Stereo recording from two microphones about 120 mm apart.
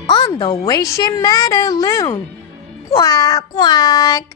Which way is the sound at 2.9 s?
30° left (ahead or behind).